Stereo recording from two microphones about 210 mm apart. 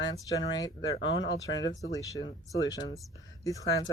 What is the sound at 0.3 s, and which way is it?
Speech, 15° left (ahead or behind).